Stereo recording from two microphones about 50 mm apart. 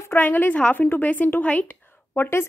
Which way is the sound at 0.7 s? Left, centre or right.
Left.